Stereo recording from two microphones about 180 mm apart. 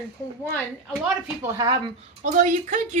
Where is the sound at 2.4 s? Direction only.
45° right (ahead or behind).